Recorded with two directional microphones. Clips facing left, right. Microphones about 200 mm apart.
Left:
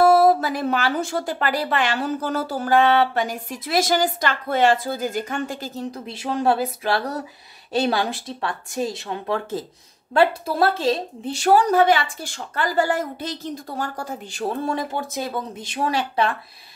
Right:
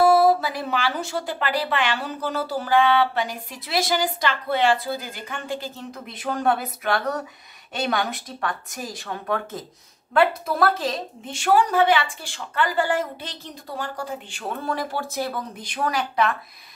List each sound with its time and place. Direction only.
0.0 s a woman's voice: 45° left (ahead or behind); by 16.3 s 30° left (ahead or behind)